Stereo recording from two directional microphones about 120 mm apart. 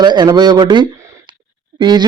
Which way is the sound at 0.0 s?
35° right (ahead or behind).